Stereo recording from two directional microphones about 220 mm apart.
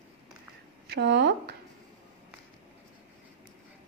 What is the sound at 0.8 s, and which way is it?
Speech, 50° right (ahead or behind).